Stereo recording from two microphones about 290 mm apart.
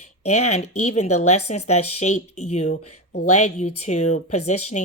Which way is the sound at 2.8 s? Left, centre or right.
Left.